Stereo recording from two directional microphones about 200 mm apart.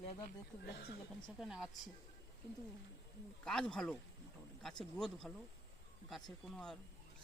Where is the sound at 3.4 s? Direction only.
5° left (ahead or behind).